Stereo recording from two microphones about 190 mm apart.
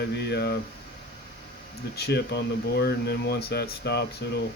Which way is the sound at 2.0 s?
60° left (ahead or behind).